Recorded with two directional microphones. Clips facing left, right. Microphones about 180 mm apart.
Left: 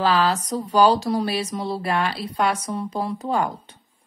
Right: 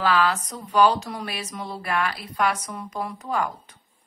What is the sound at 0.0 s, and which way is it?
Speech, 30° left (ahead or behind).